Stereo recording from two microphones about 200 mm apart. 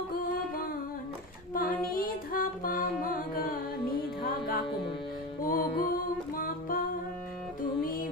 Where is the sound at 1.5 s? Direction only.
45° left (ahead or behind).